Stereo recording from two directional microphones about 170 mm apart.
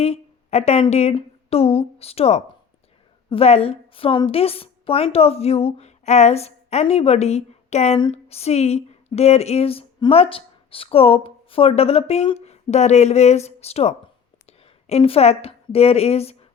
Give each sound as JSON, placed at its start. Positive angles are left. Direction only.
{"t": 0.0, "sound": "a woman's voice", "side_deg": 40}